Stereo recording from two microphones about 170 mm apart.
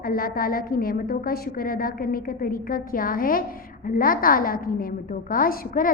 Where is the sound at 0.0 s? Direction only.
60° left (ahead or behind).